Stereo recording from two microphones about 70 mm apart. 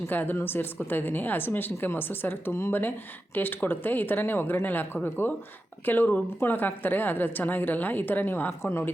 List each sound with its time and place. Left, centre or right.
0.1 s a woman's voice: left